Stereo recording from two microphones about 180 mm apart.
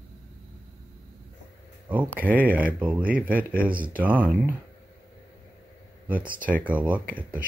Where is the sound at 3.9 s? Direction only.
10° right (ahead or behind).